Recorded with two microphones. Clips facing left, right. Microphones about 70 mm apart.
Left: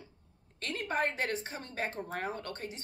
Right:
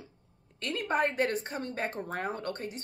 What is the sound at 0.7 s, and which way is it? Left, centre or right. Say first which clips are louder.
Speech: right 4 dB; right.